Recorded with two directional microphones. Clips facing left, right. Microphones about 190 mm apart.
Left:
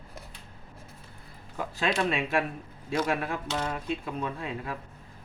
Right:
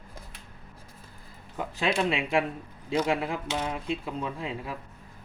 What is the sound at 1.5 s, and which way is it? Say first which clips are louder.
Speech: right 1 dB; 15° right (ahead or behind).